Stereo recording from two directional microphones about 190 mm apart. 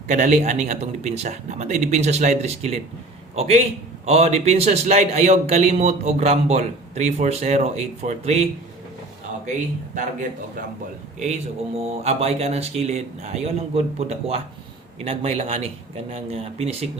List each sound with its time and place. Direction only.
0.1 s a man's voice: 40° right (ahead or behind)
9.9 s a man's voice: 40° right (ahead or behind)
12.0 s a man's voice: 35° right (ahead or behind)